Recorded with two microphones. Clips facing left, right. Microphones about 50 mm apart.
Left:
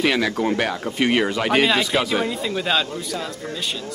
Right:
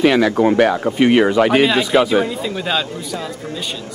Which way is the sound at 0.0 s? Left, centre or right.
Centre.